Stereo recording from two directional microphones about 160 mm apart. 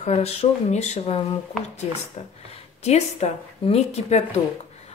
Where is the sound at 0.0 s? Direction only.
40° left (ahead or behind).